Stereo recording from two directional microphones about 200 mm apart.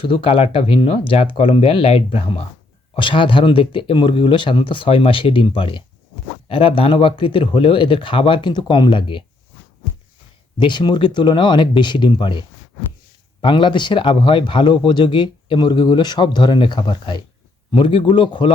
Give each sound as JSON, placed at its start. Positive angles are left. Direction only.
{"t": 0.1, "sound": "speech", "side_deg": 25}
{"t": 10.6, "sound": "speech", "side_deg": 20}